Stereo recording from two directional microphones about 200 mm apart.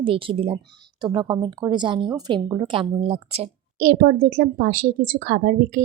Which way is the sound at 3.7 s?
45° right (ahead or behind).